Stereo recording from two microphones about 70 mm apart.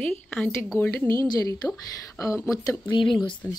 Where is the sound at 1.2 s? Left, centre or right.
Left.